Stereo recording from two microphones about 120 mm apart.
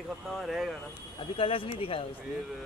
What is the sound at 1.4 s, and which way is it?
Speech, 50° left (ahead or behind).